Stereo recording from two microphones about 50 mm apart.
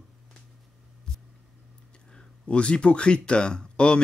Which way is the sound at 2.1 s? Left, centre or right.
Centre.